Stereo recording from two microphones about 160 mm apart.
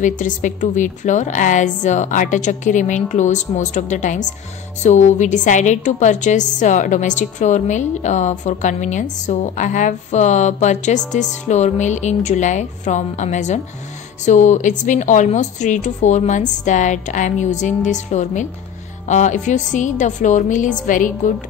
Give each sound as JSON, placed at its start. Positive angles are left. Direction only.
{"t": 0.0, "sound": "a woman's voice", "side_deg": 50}